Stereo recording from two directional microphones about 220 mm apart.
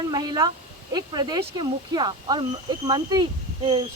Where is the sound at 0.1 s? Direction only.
15° right (ahead or behind).